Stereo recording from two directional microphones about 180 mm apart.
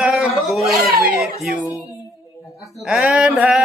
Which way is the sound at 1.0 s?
5° right (ahead or behind).